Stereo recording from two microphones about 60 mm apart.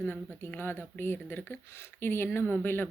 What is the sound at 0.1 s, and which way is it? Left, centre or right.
Speech, left.